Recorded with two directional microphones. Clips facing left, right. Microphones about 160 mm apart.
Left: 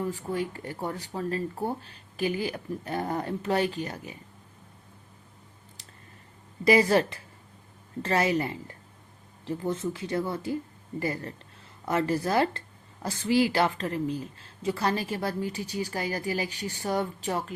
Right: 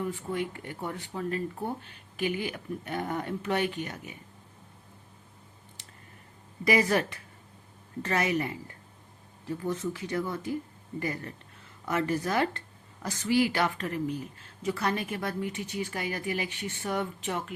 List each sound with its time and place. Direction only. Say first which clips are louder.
0.0 s speech: left 2 dB; 35° left (ahead or behind)
6.7 s speech: left 4 dB; 30° left (ahead or behind)